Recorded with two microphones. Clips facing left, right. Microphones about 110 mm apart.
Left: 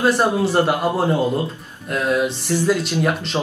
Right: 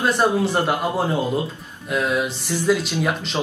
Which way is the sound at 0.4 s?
Centre (ahead or behind).